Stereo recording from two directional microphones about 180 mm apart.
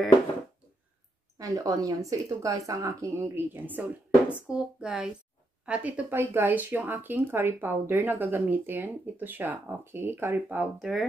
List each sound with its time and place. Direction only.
1.4 s speech: 20° right (ahead or behind); by 11.1 s centre (ahead or behind)